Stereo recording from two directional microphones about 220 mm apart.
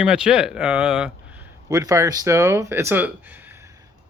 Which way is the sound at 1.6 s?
15° right (ahead or behind).